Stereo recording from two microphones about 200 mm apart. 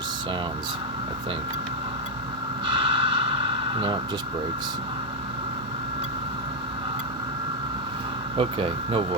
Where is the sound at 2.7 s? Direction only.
25° right (ahead or behind).